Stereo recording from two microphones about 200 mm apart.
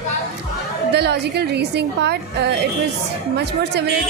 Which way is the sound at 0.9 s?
55° right (ahead or behind).